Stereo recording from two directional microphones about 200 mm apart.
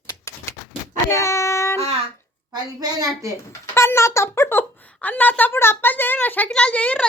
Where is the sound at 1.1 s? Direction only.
15° left (ahead or behind).